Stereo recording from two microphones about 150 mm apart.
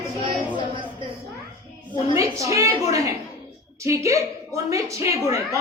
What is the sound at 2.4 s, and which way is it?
Speech, 20° right (ahead or behind).